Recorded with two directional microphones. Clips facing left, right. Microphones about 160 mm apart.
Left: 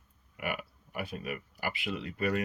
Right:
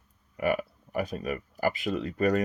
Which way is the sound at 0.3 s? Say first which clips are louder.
Right 9 dB; 40° right (ahead or behind).